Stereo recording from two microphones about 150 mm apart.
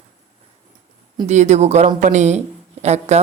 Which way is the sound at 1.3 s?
50° right (ahead or behind).